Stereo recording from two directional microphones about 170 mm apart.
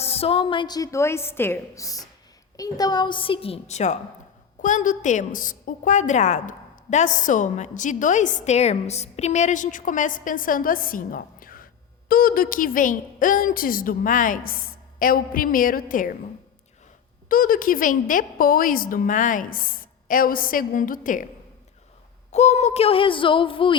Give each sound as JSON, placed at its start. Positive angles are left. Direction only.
{"t": 0.0, "sound": "a woman's voice", "side_deg": 35}
{"t": 17.2, "sound": "a woman's voice", "side_deg": 55}
{"t": 22.3, "sound": "speech", "side_deg": 40}